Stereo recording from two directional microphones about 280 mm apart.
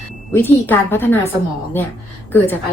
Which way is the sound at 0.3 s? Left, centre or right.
Centre.